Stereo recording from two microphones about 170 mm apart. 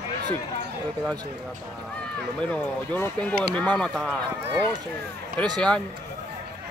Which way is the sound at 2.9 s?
10° left (ahead or behind).